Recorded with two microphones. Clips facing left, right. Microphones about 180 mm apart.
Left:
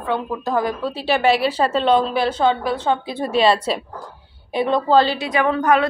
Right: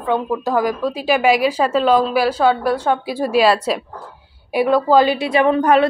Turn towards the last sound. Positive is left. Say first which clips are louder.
# right 4 dB
turn(degrees=-30)  # may be behind; listen again after turning